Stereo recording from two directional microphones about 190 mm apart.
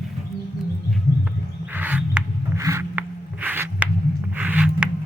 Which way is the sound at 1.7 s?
10° right (ahead or behind).